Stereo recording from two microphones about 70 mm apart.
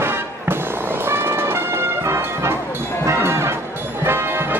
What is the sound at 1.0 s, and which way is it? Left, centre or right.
Music, right.